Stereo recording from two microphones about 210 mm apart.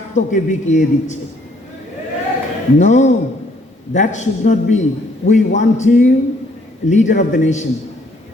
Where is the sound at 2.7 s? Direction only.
35° left (ahead or behind).